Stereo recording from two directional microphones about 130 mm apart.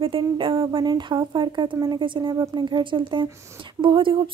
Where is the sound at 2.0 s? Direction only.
40° right (ahead or behind).